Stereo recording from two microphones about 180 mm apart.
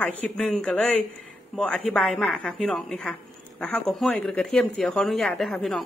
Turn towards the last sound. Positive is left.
turn(degrees=5)  # may be behind; listen again after turning